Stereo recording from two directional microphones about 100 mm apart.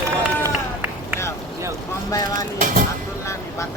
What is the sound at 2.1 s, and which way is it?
Speech, 35° left (ahead or behind).